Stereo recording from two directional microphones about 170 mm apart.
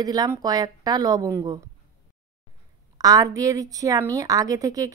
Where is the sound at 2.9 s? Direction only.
20° right (ahead or behind).